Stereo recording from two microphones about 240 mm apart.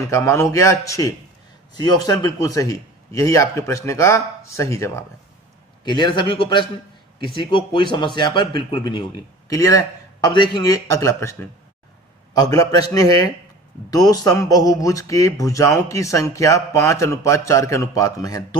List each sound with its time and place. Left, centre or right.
0.1 s a man's voice: centre